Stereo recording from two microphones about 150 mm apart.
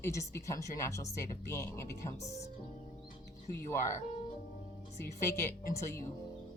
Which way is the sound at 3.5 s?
15° left (ahead or behind).